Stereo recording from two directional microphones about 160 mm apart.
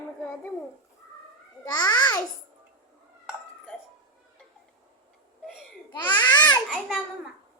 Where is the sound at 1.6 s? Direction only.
25° left (ahead or behind).